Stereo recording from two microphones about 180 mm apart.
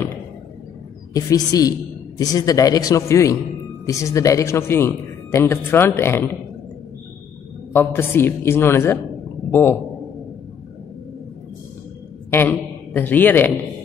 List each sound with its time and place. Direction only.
1.1 s a man's voice: 20° left (ahead or behind)
7.7 s a man's voice: 10° left (ahead or behind)
12.3 s a man's voice: 10° left (ahead or behind)